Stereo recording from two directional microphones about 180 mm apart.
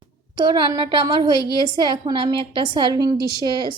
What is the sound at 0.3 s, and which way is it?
A woman's voice, 25° right (ahead or behind).